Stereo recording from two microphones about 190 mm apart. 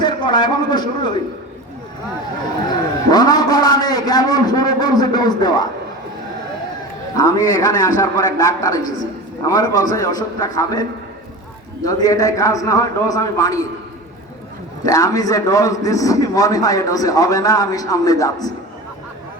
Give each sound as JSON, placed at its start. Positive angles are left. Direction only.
{"t": 0.0, "sound": "a man's voice", "side_deg": 20}
{"t": 2.6, "sound": "a man's voice", "side_deg": 20}
{"t": 7.2, "sound": "a man's voice", "side_deg": 20}
{"t": 11.9, "sound": "a man's voice", "side_deg": 20}
{"t": 14.8, "sound": "a man's voice", "side_deg": 20}